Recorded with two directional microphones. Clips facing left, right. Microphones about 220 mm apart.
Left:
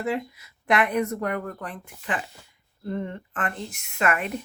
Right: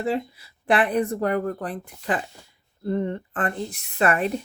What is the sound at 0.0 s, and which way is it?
Speech, 30° right (ahead or behind).